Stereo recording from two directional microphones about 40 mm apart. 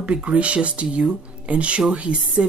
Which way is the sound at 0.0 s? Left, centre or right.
Right.